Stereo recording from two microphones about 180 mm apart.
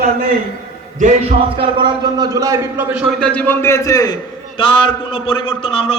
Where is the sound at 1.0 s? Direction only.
40° right (ahead or behind).